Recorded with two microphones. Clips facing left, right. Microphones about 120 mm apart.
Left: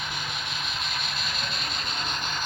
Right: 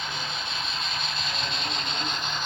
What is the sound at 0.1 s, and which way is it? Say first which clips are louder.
Vehicle: right 1 dB; 25° right (ahead or behind).